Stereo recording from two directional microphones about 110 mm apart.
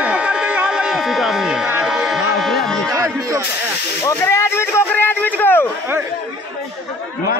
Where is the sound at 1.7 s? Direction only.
10° right (ahead or behind).